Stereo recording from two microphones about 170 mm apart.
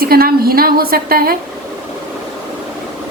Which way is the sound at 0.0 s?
60° right (ahead or behind).